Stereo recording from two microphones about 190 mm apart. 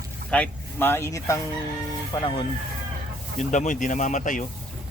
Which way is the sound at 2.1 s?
25° left (ahead or behind).